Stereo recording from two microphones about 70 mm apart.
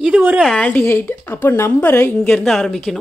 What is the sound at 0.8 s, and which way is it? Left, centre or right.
A woman's voice, left.